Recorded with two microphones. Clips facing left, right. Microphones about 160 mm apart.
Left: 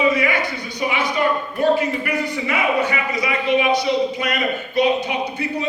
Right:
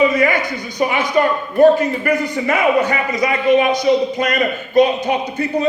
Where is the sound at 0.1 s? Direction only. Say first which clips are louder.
Right 4 dB; 45° right (ahead or behind).